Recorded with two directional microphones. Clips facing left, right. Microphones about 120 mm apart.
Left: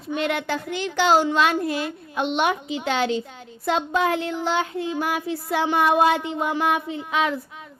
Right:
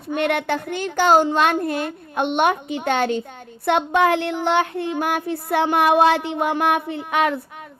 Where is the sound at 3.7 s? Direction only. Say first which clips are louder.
Right 4 dB; 65° right (ahead or behind).